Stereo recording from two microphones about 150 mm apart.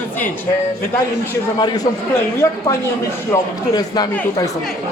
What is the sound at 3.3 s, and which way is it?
Speech, 25° left (ahead or behind).